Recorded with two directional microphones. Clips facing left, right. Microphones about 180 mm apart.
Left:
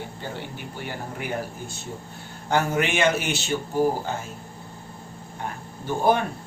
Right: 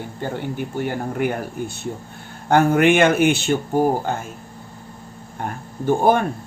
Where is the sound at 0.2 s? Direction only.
50° right (ahead or behind).